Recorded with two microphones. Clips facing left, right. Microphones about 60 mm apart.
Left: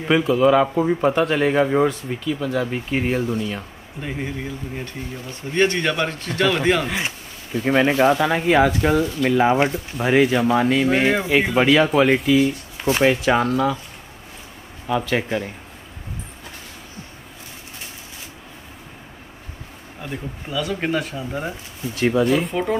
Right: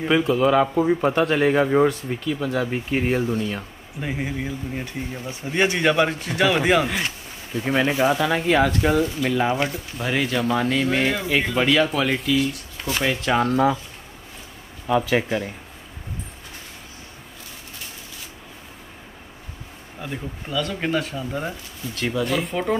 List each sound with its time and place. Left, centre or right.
0.0 s speech: centre
7.6 s speech: centre
9.3 s speech: centre
10.1 s speech: centre
12.8 s speech: left
13.2 s speech: centre
14.9 s speech: centre
20.0 s speech: centre